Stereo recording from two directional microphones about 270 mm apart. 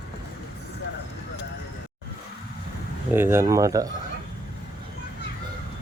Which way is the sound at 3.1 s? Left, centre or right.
Centre.